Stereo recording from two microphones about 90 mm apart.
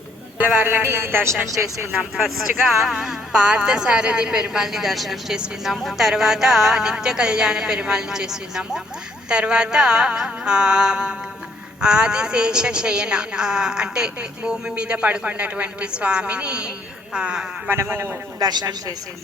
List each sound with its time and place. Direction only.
0.3 s a woman's voice: 20° right (ahead or behind)
2.0 s speech: 5° right (ahead or behind)
17.7 s a woman's voice: 25° right (ahead or behind)
18.3 s a woman's voice: 45° right (ahead or behind)